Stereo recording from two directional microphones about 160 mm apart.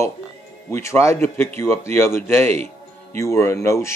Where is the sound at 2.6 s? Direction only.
15° left (ahead or behind).